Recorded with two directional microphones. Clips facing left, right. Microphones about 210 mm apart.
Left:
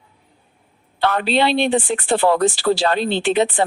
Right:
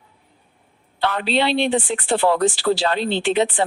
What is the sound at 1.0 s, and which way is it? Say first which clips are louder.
A woman's voice: left 2 dB; 50° left (ahead or behind).